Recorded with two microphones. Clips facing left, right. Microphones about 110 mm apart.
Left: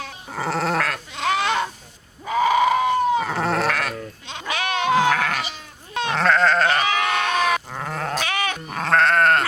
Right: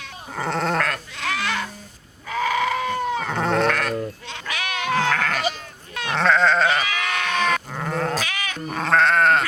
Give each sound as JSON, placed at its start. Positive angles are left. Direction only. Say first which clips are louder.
{"t": 0.3, "sound": "goat", "louder": "even", "side_deg": 5}
{"t": 1.1, "sound": "goat", "louder": "left 5 dB", "side_deg": 20}
{"t": 3.2, "sound": "goat", "louder": "right 1 dB", "side_deg": 5}
{"t": 4.3, "sound": "sheep", "louder": "left 3 dB", "side_deg": 20}
{"t": 4.5, "sound": "goat", "louder": "left 5 dB", "side_deg": 30}
{"t": 4.9, "sound": "goat", "louder": "left 3 dB", "side_deg": 15}
{"t": 5.9, "sound": "goat", "louder": "left 4 dB", "side_deg": 25}
{"t": 6.1, "sound": "goat", "louder": "even", "side_deg": 0}
{"t": 6.8, "sound": "sheep", "louder": "left 5 dB", "side_deg": 30}
{"t": 7.3, "sound": "goat", "louder": "left 1 dB", "side_deg": 5}
{"t": 8.2, "sound": "goat", "louder": "left 5 dB", "side_deg": 50}
{"t": 8.7, "sound": "goat", "louder": "even", "side_deg": 0}